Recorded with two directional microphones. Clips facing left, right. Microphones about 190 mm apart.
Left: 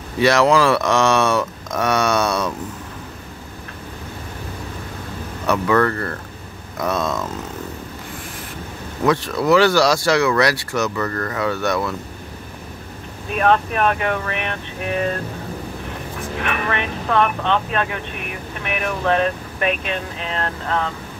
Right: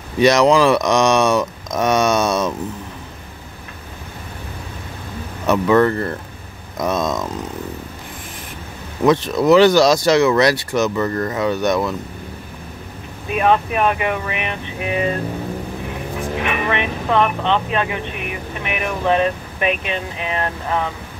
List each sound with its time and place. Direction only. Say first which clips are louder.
0.2 s speech: right 2 dB; 20° right (ahead or behind)
5.5 s speech: right 3 dB; 20° right (ahead or behind)
9.0 s speech: right 4 dB; 20° right (ahead or behind)
13.3 s speech: right 1 dB; 10° right (ahead or behind)
16.3 s speech: right 2 dB; 15° right (ahead or behind)